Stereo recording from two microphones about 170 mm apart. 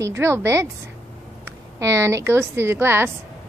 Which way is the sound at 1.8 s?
15° right (ahead or behind).